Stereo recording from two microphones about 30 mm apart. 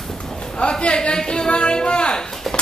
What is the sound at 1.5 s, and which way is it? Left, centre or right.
Music, left.